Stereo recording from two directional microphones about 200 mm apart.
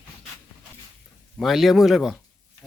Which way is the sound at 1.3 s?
Centre (ahead or behind).